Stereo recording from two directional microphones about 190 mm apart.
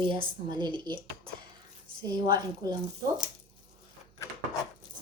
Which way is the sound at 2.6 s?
20° right (ahead or behind).